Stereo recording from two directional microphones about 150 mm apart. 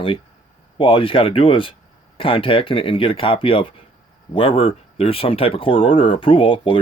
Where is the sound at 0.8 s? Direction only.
35° left (ahead or behind).